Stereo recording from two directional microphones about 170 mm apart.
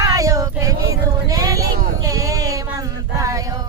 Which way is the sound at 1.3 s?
20° right (ahead or behind).